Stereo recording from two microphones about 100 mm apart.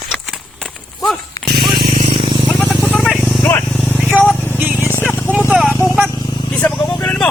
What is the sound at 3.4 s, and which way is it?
Vehicle, 15° left (ahead or behind).